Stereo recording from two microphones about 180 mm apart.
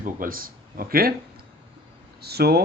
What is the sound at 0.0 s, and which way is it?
Speech, 50° right (ahead or behind).